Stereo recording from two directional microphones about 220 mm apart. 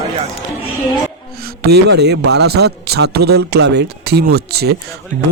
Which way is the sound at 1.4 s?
45° right (ahead or behind).